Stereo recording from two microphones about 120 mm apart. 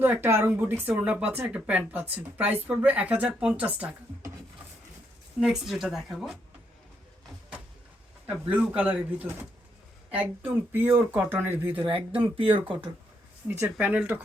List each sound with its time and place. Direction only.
0.0 s speech: 20° right (ahead or behind)
5.4 s a woman's voice: 5° right (ahead or behind)
8.3 s speech: 10° right (ahead or behind)
10.7 s speech: 15° right (ahead or behind)
11.8 s speech: 45° right (ahead or behind)
13.5 s speech: 15° right (ahead or behind)